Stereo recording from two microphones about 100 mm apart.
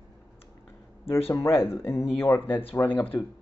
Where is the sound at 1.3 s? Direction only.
25° left (ahead or behind).